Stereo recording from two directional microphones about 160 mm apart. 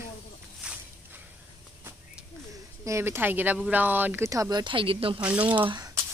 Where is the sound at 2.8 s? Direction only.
15° right (ahead or behind); by 5.2 s 35° right (ahead or behind).